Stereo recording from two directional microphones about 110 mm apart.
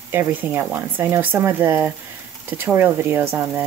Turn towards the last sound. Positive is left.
turn(degrees=-20)  # may be behind; listen again after turning